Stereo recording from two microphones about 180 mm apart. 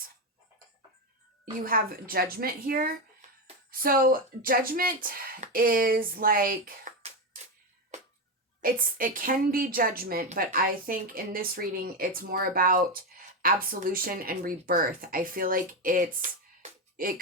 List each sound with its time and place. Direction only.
1.6 s speech: 55° right (ahead or behind)
8.6 s speech: 50° right (ahead or behind)